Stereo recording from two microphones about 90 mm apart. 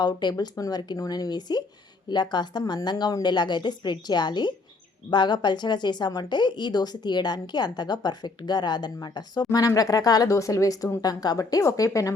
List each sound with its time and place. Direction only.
0.0 s a woman's voice: 55° left (ahead or behind); by 12.1 s 40° left (ahead or behind)